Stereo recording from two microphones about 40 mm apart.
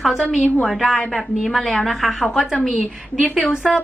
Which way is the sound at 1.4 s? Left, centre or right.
Centre.